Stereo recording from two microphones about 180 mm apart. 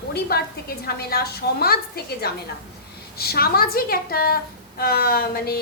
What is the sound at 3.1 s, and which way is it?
A woman's voice, 60° left (ahead or behind).